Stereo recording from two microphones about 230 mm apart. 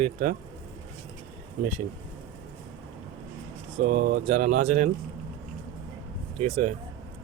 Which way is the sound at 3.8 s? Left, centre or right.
Right.